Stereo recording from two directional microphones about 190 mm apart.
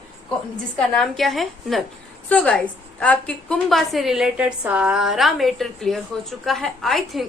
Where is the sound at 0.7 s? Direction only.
Centre (ahead or behind).